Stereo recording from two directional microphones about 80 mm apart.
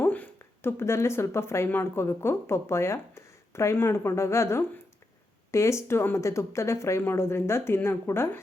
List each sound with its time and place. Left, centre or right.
0.0 s speech: left